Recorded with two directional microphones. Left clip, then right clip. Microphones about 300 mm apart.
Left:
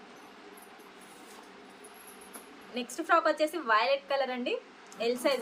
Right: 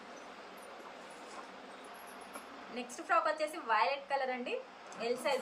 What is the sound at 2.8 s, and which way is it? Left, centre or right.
A woman's voice, left.